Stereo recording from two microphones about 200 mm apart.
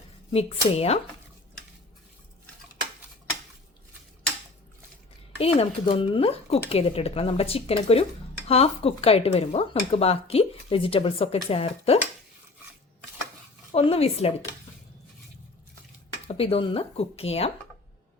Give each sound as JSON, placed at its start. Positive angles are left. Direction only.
{"t": 0.3, "sound": "speech", "side_deg": 30}
{"t": 5.4, "sound": "speech", "side_deg": 30}
{"t": 13.7, "sound": "speech", "side_deg": 30}
{"t": 16.2, "sound": "speech", "side_deg": 30}